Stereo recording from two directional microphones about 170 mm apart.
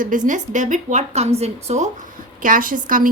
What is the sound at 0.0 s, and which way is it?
A woman's voice, 50° right (ahead or behind).